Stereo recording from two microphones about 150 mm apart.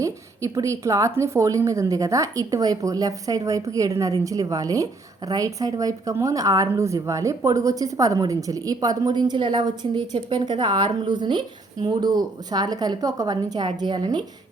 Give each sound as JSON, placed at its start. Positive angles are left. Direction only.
{"t": 0.0, "sound": "a woman's voice", "side_deg": -20}